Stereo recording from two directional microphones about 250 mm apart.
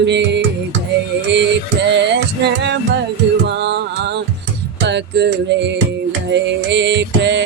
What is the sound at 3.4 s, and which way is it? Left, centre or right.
Music, right.